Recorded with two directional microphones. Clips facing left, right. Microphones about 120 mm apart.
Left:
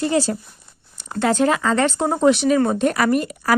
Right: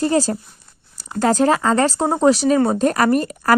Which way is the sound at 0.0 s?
40° right (ahead or behind).